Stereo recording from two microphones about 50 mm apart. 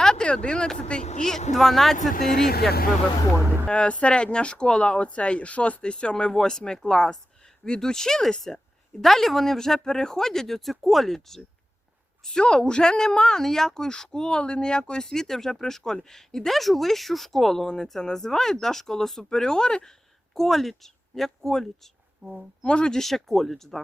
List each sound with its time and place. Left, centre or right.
0.0 s a woman's voice: centre
3.7 s a woman's voice: left
20.3 s a woman's voice: centre
22.2 s a woman's voice: centre
22.6 s speech: centre
23.0 s speech: centre